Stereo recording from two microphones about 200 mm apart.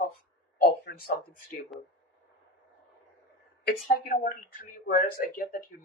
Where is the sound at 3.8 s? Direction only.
45° left (ahead or behind).